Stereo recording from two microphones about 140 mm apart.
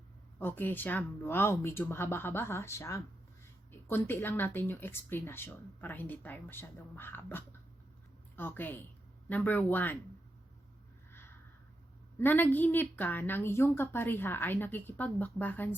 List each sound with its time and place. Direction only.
0.3 s speech: 15° left (ahead or behind)
11.1 s a sound: 15° left (ahead or behind)
12.2 s speech: 15° left (ahead or behind)